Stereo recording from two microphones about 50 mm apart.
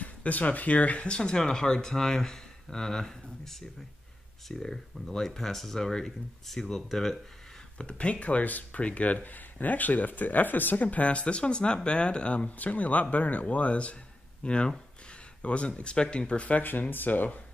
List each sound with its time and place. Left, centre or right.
0.0 s speech: left; by 7.2 s centre
7.7 s speech: left